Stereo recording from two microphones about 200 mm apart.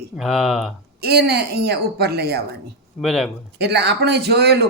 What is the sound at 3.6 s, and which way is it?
Speech, 55° right (ahead or behind).